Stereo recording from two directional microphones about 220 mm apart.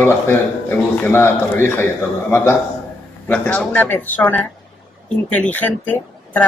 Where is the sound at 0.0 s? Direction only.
10° left (ahead or behind).